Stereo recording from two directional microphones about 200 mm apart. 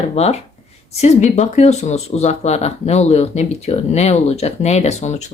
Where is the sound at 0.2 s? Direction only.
30° left (ahead or behind).